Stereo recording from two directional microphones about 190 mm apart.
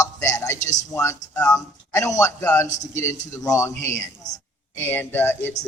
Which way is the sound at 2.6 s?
40° left (ahead or behind).